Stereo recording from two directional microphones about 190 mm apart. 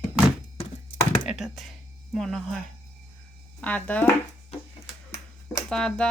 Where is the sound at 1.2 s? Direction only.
Centre (ahead or behind).